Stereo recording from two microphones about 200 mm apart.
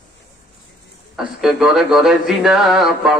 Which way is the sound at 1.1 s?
Centre (ahead or behind).